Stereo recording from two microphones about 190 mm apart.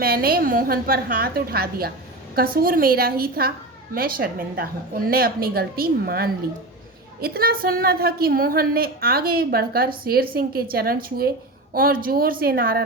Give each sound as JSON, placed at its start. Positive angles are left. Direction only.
{"t": 0.0, "sound": "a woman's voice", "side_deg": -50}